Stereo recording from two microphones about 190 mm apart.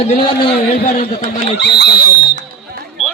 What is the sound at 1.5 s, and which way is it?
Speech, 60° left (ahead or behind).